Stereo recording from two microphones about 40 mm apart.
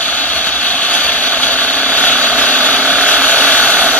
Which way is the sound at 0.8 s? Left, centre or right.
Left.